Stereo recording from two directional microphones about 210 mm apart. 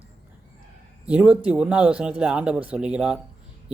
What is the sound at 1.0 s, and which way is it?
Speech, 5° right (ahead or behind).